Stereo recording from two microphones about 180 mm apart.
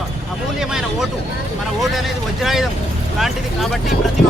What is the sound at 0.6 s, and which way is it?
Vehicle, 5° right (ahead or behind).